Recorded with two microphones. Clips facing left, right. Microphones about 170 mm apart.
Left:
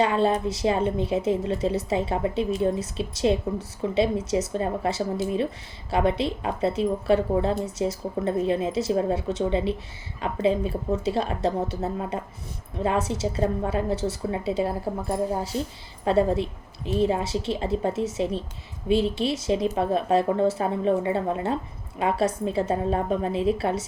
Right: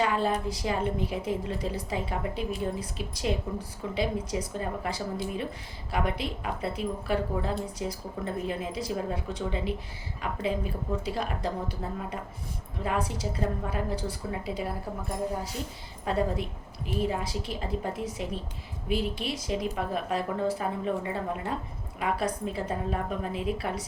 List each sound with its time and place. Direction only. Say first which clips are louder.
0.0 s speech: left 5 dB; 25° left (ahead or behind)